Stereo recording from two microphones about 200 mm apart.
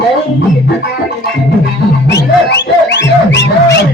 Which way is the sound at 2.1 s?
60° left (ahead or behind).